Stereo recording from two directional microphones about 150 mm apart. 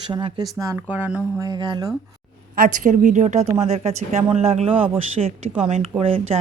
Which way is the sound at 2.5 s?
65° right (ahead or behind).